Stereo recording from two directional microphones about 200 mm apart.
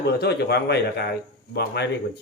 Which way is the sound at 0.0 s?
55° left (ahead or behind).